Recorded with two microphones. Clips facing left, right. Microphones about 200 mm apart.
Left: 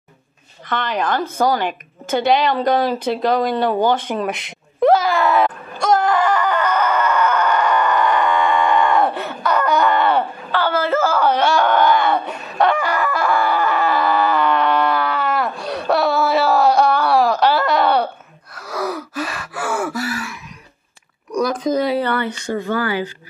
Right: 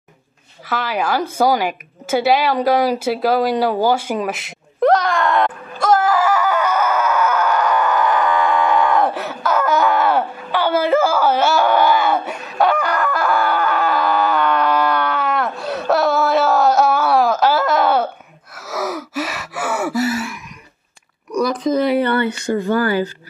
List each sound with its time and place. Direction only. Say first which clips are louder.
0.7 s a woman's voice: even; 5° right (ahead or behind)
1.4 s a sound: right 2 dB; 10° right (ahead or behind)
10.6 s groan: right 3 dB; 15° right (ahead or behind)
15.6 s wail: right 2 dB; centre (ahead or behind)
18.6 s gasp: even; 5° right (ahead or behind)
22.8 s speech: right 4 dB; 45° right (ahead or behind)